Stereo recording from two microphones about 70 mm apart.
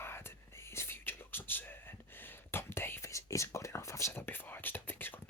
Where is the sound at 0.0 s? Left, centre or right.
Left.